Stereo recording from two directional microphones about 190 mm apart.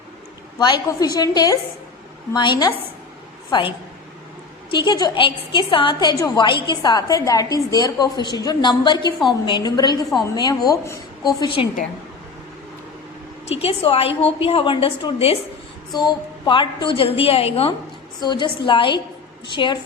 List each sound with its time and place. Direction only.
0.6 s a woman's voice: 20° left (ahead or behind)
13.5 s a woman's voice: 30° left (ahead or behind)